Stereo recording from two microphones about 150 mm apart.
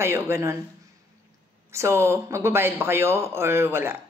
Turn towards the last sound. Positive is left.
turn(degrees=-15)  # may be behind; listen again after turning